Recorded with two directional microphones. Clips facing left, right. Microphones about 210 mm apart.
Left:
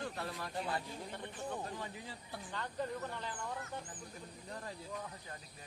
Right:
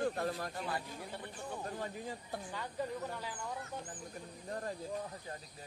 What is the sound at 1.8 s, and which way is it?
Speech, 45° right (ahead or behind).